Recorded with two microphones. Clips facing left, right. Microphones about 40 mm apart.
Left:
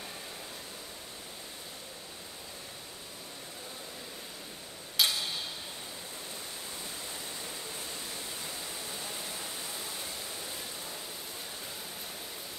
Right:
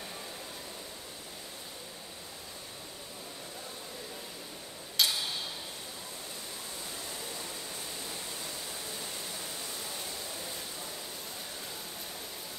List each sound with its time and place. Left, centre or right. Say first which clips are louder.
5.0 s tick-tock: left 1 dB; centre